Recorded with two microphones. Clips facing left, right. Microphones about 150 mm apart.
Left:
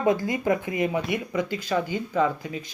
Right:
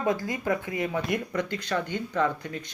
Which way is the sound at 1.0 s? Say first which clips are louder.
Left 2 dB; 5° left (ahead or behind).